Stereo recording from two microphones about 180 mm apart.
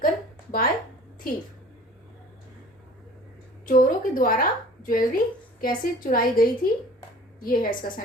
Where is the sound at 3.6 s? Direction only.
50° left (ahead or behind).